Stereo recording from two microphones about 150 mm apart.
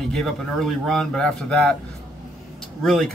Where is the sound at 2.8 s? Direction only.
Centre (ahead or behind).